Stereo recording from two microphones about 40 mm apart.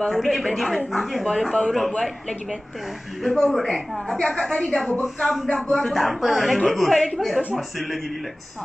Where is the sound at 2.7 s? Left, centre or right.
Centre.